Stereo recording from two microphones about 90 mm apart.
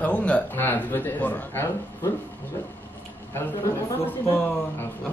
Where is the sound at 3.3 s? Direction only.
25° left (ahead or behind).